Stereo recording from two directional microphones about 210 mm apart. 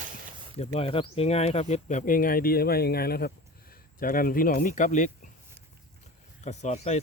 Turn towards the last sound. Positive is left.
turn(degrees=35)  # may be behind; listen again after turning